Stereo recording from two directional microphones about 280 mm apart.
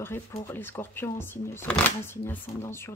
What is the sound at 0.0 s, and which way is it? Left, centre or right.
A woman's voice, centre.